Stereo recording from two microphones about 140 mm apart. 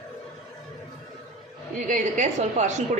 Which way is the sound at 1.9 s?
60° right (ahead or behind).